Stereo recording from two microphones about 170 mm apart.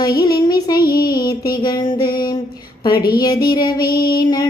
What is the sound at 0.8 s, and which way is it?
Child singing, 60° left (ahead or behind).